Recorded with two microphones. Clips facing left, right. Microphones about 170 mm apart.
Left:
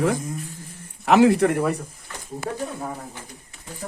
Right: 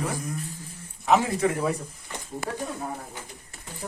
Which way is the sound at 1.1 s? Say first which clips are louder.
Left 6 dB; 75° left (ahead or behind).